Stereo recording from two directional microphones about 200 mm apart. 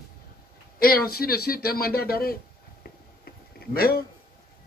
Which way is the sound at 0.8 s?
50° left (ahead or behind).